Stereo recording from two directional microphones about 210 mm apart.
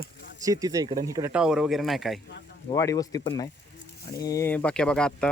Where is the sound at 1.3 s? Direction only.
5° right (ahead or behind).